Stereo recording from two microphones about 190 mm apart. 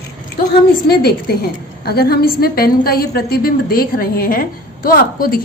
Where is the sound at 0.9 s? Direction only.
55° left (ahead or behind).